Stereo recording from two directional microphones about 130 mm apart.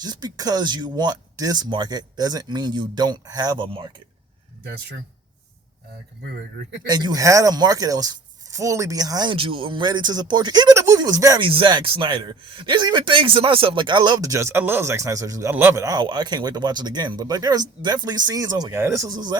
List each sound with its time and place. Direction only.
0.0 s speech: 30° right (ahead or behind)
6.8 s speech: 30° right (ahead or behind)
11.3 s speech: 40° right (ahead or behind)